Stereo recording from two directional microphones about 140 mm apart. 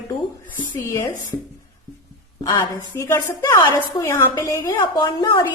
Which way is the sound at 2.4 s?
30° left (ahead or behind).